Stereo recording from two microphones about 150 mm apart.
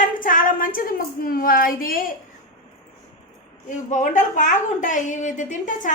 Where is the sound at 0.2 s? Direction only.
65° left (ahead or behind).